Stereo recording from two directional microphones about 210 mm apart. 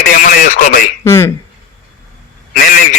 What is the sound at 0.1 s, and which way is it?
Radio, 40° left (ahead or behind).